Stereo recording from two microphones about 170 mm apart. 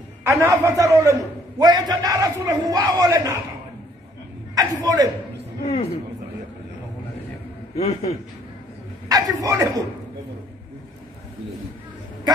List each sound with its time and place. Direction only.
0.2 s a man's voice: 15° right (ahead or behind)
4.6 s a man's voice: 20° right (ahead or behind)
7.7 s a man's voice: 35° left (ahead or behind)
9.1 s a man's voice: 20° right (ahead or behind)